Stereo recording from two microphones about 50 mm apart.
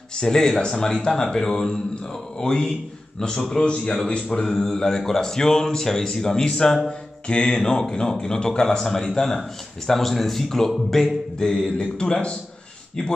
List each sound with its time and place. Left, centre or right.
0.1 s a man's voice: centre